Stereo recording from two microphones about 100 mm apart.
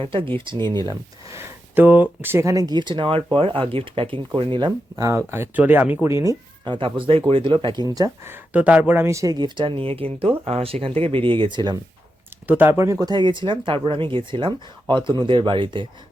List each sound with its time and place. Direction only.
0.0 s speech: 60° right (ahead or behind)
1.4 s speech: 20° right (ahead or behind); by 4.7 s 55° right (ahead or behind)
4.9 s speech: 35° right (ahead or behind)
5.2 s speech: 20° right (ahead or behind)
6.1 s speech: 30° right (ahead or behind)
6.7 s speech: 55° right (ahead or behind); by 8.1 s 35° right (ahead or behind)
8.2 s speech: 20° right (ahead or behind)
9.0 s speech: 35° right (ahead or behind)
12.5 s speech: 20° right (ahead or behind)
13.1 s speech: 50° right (ahead or behind)